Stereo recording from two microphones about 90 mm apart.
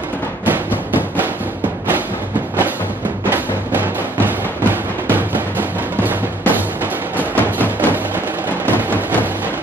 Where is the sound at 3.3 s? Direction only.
20° right (ahead or behind).